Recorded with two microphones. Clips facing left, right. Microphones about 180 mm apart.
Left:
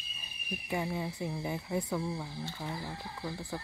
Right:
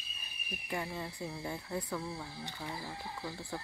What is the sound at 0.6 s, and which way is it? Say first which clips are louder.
Speech: left 4 dB; 15° left (ahead or behind).